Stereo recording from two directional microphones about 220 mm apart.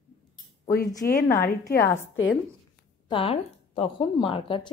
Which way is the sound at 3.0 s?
25° left (ahead or behind).